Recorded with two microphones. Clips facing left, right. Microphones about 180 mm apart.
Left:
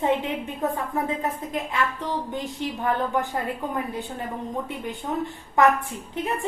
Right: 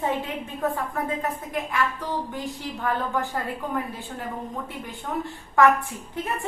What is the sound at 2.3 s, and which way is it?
Speech, 20° left (ahead or behind).